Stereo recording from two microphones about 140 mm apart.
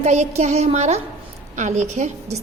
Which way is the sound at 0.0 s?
55° right (ahead or behind).